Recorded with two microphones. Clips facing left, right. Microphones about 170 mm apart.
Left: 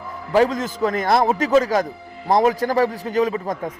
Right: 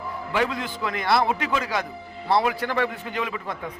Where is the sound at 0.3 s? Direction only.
40° left (ahead or behind).